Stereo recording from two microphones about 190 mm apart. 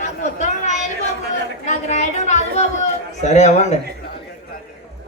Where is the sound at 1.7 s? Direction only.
35° left (ahead or behind).